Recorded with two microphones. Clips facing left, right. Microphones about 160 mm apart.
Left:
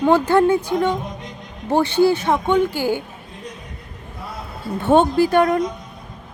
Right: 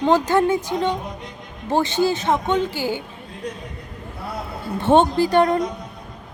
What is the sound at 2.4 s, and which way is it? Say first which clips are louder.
Speech: left 4 dB; 10° left (ahead or behind).